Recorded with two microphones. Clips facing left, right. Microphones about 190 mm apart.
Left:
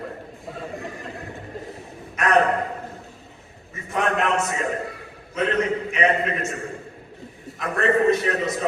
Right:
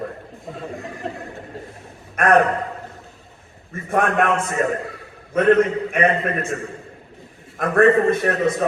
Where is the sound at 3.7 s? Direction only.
55° right (ahead or behind).